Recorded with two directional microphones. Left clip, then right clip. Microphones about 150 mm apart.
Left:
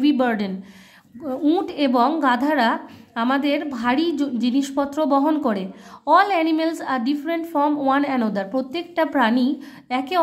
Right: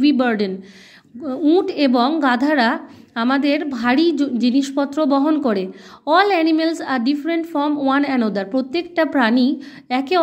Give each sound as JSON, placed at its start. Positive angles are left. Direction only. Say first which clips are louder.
{"t": 0.0, "sound": "a sound", "louder": "right 3 dB", "side_deg": -15}
{"t": 1.2, "sound": "a woman's voice", "louder": "right 4 dB", "side_deg": -10}
{"t": 7.9, "sound": "a woman's voice", "louder": "right 2 dB", "side_deg": -20}